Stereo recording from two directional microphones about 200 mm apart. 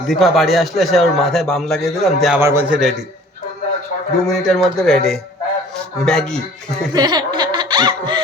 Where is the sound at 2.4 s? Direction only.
10° right (ahead or behind).